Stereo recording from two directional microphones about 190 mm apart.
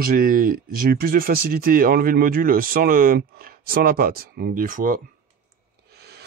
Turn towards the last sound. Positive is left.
turn(degrees=-60)  # may be behind; listen again after turning